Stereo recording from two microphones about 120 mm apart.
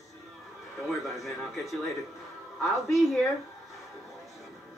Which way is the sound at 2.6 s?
Centre (ahead or behind).